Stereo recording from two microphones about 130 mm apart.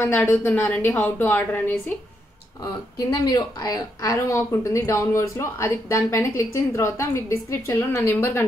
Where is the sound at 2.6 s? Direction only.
30° left (ahead or behind).